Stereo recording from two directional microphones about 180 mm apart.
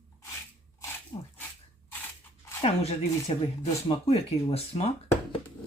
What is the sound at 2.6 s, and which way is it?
Speech, 35° left (ahead or behind).